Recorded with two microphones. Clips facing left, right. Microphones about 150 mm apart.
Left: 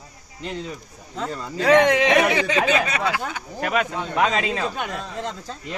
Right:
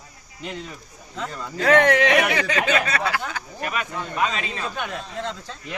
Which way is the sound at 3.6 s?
90° left.